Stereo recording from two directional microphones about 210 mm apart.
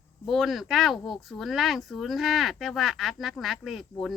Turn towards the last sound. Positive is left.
turn(degrees=0)  # may be behind; listen again after turning